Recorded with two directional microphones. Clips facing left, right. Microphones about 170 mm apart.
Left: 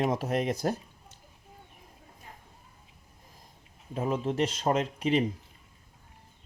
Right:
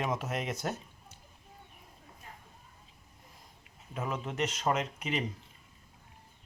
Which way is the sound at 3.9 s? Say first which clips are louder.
Left 7 dB; 30° left (ahead or behind).